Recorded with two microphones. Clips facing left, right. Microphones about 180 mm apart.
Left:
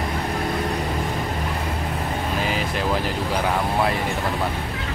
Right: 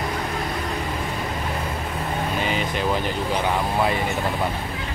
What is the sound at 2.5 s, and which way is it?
Vehicle, centre (ahead or behind).